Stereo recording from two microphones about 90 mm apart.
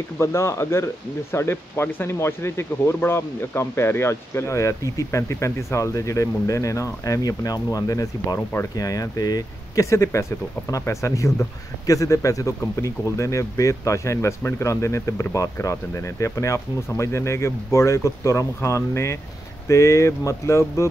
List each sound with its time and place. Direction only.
0.2 s speech: 35° left (ahead or behind)